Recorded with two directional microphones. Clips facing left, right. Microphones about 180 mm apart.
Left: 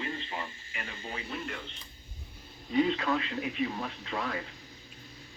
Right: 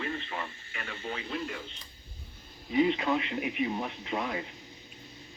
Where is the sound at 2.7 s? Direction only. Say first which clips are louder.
Right 1 dB; 15° right (ahead or behind).